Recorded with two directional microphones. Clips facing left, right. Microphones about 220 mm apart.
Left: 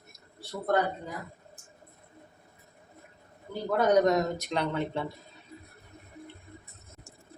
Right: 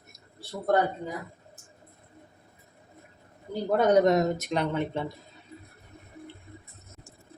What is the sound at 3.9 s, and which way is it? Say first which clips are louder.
Speech: right 2 dB; 25° right (ahead or behind).